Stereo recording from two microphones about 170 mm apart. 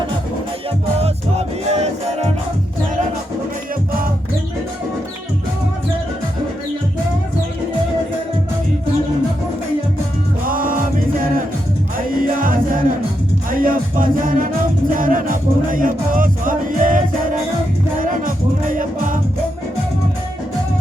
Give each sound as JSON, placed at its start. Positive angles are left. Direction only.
{"t": 1.0, "sound": "music", "side_deg": -40}
{"t": 10.5, "sound": "music", "side_deg": -55}